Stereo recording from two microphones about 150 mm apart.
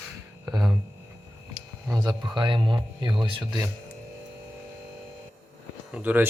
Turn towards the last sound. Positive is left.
turn(degrees=-10)  # may be behind; listen again after turning